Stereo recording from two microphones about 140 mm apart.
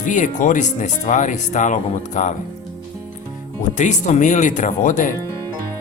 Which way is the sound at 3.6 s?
60° left (ahead or behind).